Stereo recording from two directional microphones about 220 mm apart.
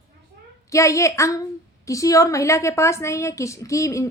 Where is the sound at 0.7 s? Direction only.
15° left (ahead or behind).